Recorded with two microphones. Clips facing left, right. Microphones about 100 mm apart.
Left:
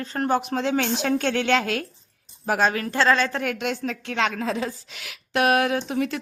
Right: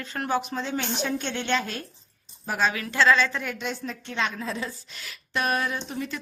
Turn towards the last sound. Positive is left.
turn(degrees=80)